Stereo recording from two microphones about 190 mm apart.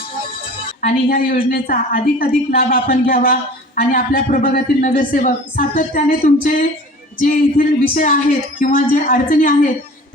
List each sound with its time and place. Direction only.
0.8 s speech: 45° left (ahead or behind)